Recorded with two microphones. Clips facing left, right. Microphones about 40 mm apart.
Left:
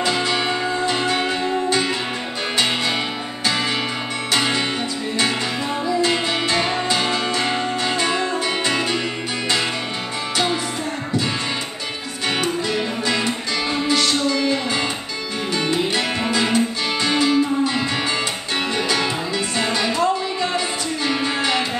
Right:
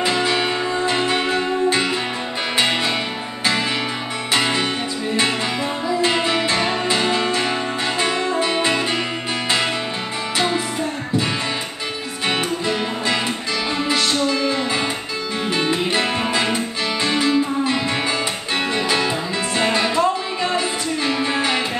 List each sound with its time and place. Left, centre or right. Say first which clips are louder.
0.0 s music: right 1 dB; right
0.3 s music: right 1 dB; centre
0.8 s music: right 2 dB; right
4.3 s music: right 1 dB; centre
5.9 s music: right 1 dB; centre
10.3 s music: right 1 dB; centre
12.3 s music: even; right
15.7 s music: right 1 dB; right
19.5 s music: right 4 dB; right
21.2 s music: right 1 dB; centre